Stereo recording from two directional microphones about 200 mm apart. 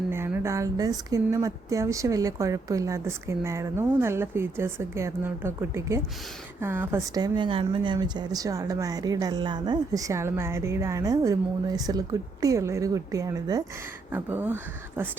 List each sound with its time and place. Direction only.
0.1 s speech: 10° right (ahead or behind)